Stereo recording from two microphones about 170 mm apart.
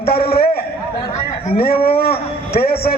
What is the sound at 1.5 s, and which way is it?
A man's voice, 60° left (ahead or behind).